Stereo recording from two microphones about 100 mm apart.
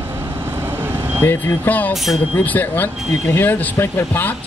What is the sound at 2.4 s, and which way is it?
Speech, 20° left (ahead or behind).